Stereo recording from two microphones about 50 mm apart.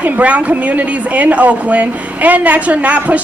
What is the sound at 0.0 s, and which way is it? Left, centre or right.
A woman's voice, right.